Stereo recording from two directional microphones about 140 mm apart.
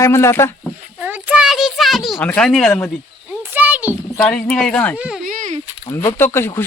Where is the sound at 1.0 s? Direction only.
10° right (ahead or behind).